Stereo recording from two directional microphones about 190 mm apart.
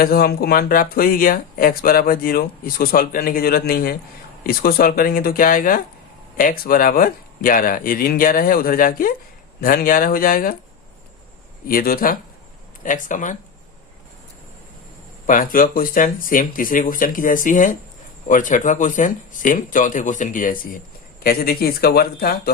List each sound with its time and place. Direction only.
0.0 s speech: 50° left (ahead or behind)
11.7 s speech: 50° left (ahead or behind)
15.3 s speech: 45° left (ahead or behind)